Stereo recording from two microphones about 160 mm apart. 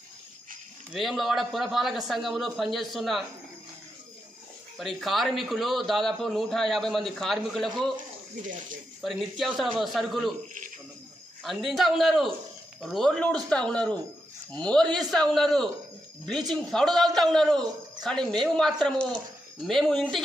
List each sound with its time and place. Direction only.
0.9 s a man's voice: centre (ahead or behind)
4.7 s a man's voice: centre (ahead or behind)
8.4 s speech: 55° right (ahead or behind)
9.0 s a man's voice: centre (ahead or behind)
11.4 s a man's voice: centre (ahead or behind)